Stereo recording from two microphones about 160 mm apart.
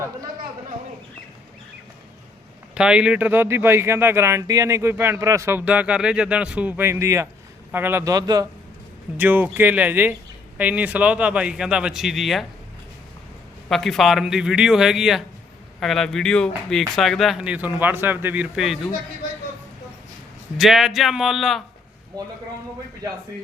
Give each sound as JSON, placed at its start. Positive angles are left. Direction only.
{"t": 2.7, "sound": "speech", "side_deg": -5}
{"t": 9.1, "sound": "speech", "side_deg": -10}
{"t": 13.7, "sound": "a man's voice", "side_deg": 0}
{"t": 20.6, "sound": "a man's voice", "side_deg": 0}
{"t": 22.1, "sound": "speech", "side_deg": -25}